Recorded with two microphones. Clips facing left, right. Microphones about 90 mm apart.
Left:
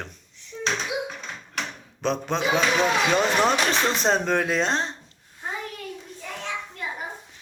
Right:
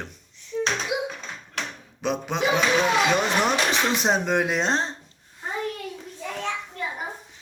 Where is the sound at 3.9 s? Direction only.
10° right (ahead or behind); by 4.9 s 30° right (ahead or behind).